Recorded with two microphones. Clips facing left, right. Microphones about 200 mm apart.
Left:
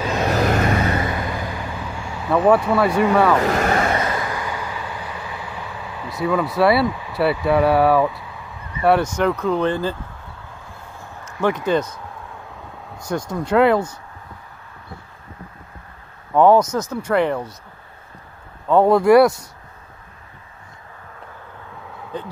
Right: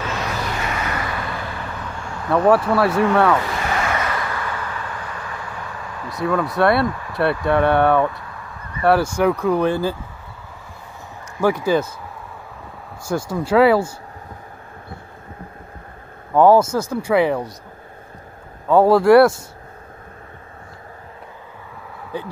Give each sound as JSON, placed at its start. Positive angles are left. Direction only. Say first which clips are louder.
{"t": 0.2, "sound": "vehicle", "louder": "left 7 dB", "side_deg": 45}
{"t": 3.0, "sound": "speech", "louder": "left 1 dB", "side_deg": 0}
{"t": 3.4, "sound": "vehicle", "louder": "left 5 dB", "side_deg": 45}
{"t": 3.9, "sound": "vehicle", "louder": "left 2 dB", "side_deg": 25}
{"t": 11.4, "sound": "speech", "louder": "right 1 dB", "side_deg": -10}
{"t": 13.0, "sound": "speech", "louder": "right 2 dB", "side_deg": -5}
{"t": 16.3, "sound": "speech", "louder": "right 1 dB", "side_deg": -5}
{"t": 18.7, "sound": "speech", "louder": "right 1 dB", "side_deg": -5}
{"t": 22.1, "sound": "speech", "louder": "right 2 dB", "side_deg": -10}